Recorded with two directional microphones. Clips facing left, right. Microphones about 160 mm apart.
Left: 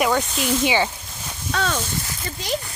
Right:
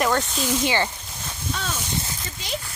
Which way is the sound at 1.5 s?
90° left.